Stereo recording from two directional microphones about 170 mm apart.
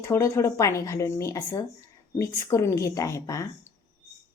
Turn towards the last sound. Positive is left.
turn(degrees=15)  # may be behind; listen again after turning